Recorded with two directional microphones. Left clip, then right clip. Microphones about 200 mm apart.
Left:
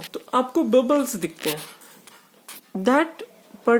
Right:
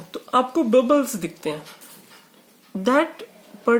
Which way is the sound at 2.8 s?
45° left (ahead or behind).